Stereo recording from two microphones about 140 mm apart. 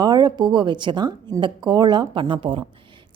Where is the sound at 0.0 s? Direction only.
30° right (ahead or behind).